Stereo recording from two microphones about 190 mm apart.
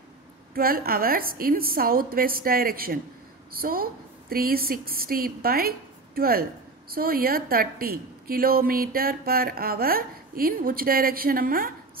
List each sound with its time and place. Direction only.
0.6 s a woman's voice: 50° right (ahead or behind)